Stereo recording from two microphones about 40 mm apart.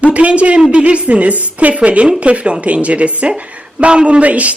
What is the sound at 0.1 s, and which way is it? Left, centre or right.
A woman's voice, right.